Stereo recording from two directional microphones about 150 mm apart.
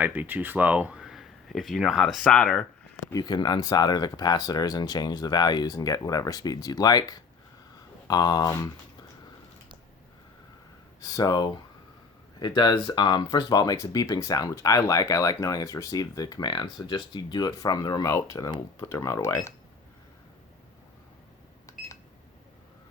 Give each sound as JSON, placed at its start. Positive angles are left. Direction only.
{"t": 0.0, "sound": "speech", "side_deg": -10}
{"t": 3.1, "sound": "speech", "side_deg": 25}
{"t": 11.0, "sound": "speech", "side_deg": 25}
{"t": 21.7, "sound": "a sound", "side_deg": 20}